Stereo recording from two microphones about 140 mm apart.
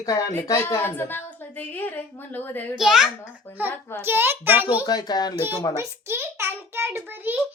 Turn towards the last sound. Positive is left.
turn(degrees=-15)  # may be behind; listen again after turning